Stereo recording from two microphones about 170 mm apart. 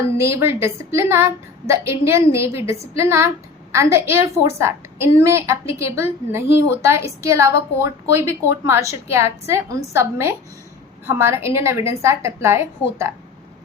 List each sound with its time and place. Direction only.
0.2 s a woman's voice: 15° right (ahead or behind)